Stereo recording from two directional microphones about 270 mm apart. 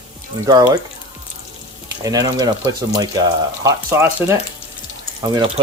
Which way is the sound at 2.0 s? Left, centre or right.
Centre.